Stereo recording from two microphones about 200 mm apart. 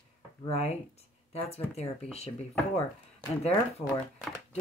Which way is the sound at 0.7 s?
30° left (ahead or behind).